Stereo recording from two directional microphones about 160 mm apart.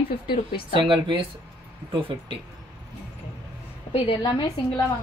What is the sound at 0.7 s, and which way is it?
Speech, 30° right (ahead or behind).